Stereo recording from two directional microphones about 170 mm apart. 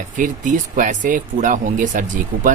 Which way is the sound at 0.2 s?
50° right (ahead or behind).